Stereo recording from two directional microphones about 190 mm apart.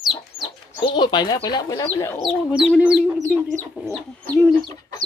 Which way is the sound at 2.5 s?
Centre (ahead or behind).